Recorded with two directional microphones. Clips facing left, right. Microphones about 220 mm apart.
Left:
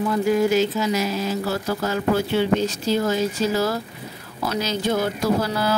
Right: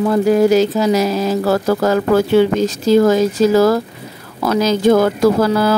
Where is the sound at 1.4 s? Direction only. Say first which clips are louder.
Right 10 dB; 90° right.